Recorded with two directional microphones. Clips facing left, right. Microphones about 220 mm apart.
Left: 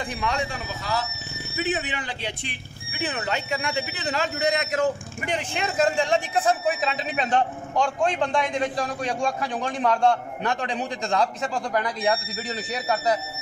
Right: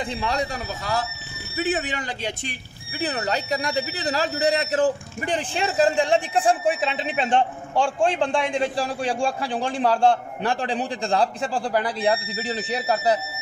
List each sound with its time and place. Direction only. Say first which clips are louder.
0.2 s a man's voice: even; 35° right (ahead or behind)